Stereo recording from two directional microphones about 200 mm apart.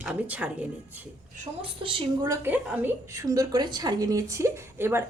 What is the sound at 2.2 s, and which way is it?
A woman's voice, 10° right (ahead or behind).